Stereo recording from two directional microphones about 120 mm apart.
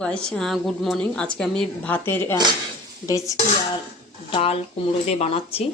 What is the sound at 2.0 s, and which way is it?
Speech, 20° left (ahead or behind).